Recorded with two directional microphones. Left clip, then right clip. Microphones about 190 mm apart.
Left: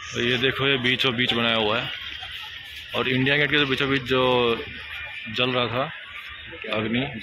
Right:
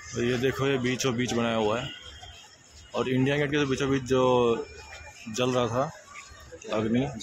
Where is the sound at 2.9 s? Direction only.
5° right (ahead or behind).